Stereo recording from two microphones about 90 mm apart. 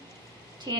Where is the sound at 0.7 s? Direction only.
50° right (ahead or behind).